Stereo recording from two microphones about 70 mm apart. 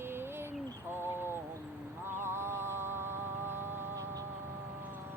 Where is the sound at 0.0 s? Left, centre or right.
Right.